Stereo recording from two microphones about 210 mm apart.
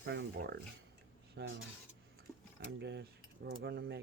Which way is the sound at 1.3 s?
60° right (ahead or behind).